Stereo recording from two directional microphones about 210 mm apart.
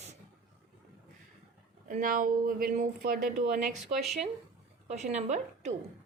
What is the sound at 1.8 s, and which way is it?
Speech, 40° right (ahead or behind).